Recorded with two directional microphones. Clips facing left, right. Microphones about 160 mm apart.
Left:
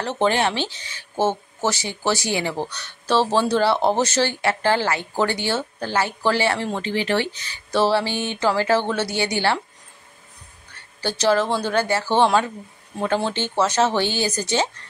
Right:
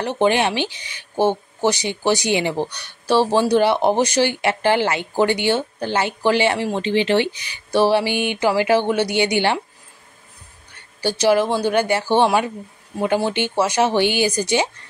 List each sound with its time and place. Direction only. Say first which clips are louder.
0.0 s speech: right 3 dB; 15° right (ahead or behind)
11.0 s speech: right 3 dB; 15° right (ahead or behind)